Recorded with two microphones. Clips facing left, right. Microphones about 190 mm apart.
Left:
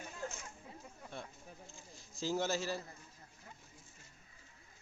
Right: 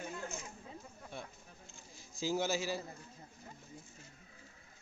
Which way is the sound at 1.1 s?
Centre (ahead or behind).